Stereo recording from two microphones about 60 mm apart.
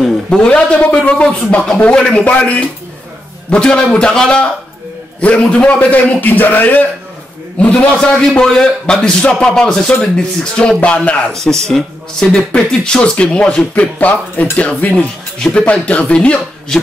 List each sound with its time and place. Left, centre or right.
0.0 s a sound: centre
0.6 s speech: left
2.0 s a man's voice: centre
2.2 s a man's voice: left
7.7 s a man's voice: centre
10.8 s speech: left
11.3 s a man's voice: centre; by 15.0 s left
15.3 s speech: centre